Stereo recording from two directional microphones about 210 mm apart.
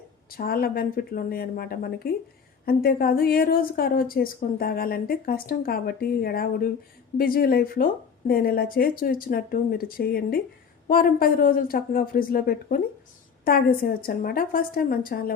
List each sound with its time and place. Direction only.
0.3 s speech: 45° left (ahead or behind)